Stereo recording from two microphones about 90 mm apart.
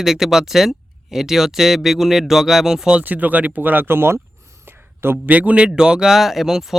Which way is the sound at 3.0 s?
20° right (ahead or behind).